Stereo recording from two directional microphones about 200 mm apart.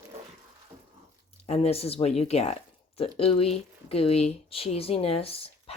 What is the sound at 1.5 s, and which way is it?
Speech, 30° left (ahead or behind).